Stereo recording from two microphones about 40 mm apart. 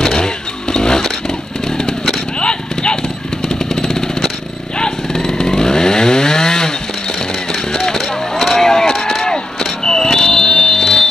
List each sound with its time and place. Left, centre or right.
0.0 s vehicle: centre
2.4 s clip-clop: left
3.4 s vehicle: centre
4.7 s chainsaw: centre
7.5 s a sound: centre